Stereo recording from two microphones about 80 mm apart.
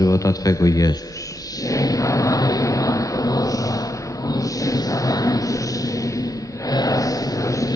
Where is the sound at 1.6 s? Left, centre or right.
Left.